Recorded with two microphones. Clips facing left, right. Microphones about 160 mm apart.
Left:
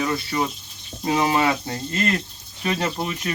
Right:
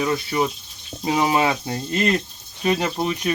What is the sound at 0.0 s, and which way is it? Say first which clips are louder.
Speech: right 2 dB; 15° right (ahead or behind).